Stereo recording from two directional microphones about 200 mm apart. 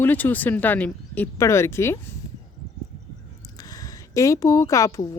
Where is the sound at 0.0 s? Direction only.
10° left (ahead or behind).